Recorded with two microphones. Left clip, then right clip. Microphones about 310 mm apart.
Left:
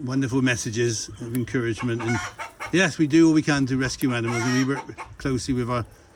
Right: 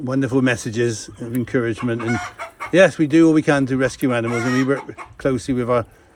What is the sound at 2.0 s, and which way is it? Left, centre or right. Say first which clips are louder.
Chicken: right 3 dB; centre.